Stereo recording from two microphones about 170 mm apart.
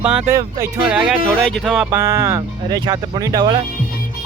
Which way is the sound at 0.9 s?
5° right (ahead or behind).